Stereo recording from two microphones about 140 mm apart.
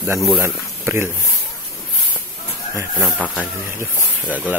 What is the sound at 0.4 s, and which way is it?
Speech, 15° right (ahead or behind).